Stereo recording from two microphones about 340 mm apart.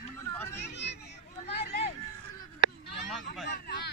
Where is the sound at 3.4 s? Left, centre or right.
Left.